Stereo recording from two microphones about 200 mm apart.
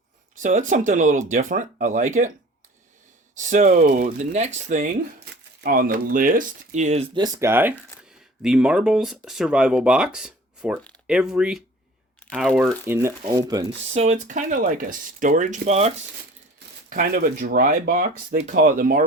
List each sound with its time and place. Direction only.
0.3 s speech: 40° right (ahead or behind)
3.3 s speech: 40° right (ahead or behind)
7.3 s speech: 10° right (ahead or behind)
12.8 s speech: 10° right (ahead or behind)
13.9 s speech: 35° right (ahead or behind)
16.9 s speech: 45° right (ahead or behind)